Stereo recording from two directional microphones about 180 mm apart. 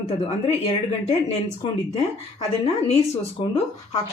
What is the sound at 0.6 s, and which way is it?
Speech, 35° left (ahead or behind).